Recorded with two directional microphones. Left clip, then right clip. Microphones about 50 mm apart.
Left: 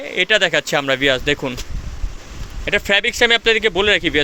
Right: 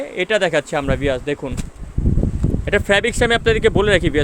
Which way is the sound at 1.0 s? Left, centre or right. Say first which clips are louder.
Left 4 dB; centre.